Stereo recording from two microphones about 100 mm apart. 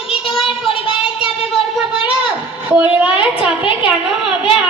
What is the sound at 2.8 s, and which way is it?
A woman's voice, 15° right (ahead or behind).